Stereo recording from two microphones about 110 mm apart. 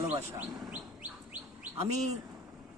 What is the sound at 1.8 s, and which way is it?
Speech, 90° right.